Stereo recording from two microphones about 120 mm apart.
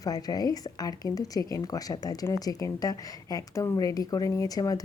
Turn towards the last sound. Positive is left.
turn(degrees=30)  # may be behind; listen again after turning